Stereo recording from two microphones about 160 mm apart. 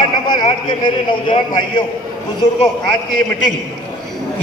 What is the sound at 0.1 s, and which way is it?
A man's voice, 25° left (ahead or behind).